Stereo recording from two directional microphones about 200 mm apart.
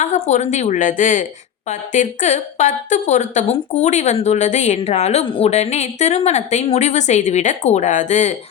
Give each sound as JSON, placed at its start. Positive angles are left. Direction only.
{"t": 0.0, "sound": "a woman's voice", "side_deg": 35}